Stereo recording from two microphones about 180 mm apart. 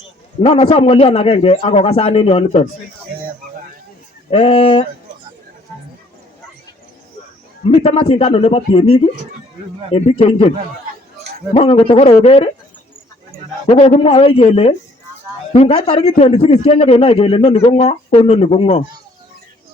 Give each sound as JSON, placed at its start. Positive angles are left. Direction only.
{"t": 0.4, "sound": "a man's voice", "side_deg": 35}
{"t": 4.3, "sound": "a man's voice", "side_deg": 35}
{"t": 7.6, "sound": "a man's voice", "side_deg": 35}
{"t": 11.5, "sound": "a man's voice", "side_deg": 30}
{"t": 13.7, "sound": "a man's voice", "side_deg": 35}